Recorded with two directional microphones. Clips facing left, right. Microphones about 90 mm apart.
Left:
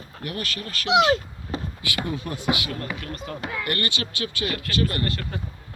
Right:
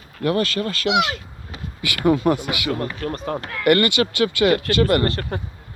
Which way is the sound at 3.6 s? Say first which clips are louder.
Right 15 dB; 85° right.